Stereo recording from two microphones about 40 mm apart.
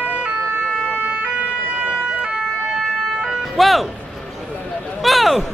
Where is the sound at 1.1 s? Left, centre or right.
Right.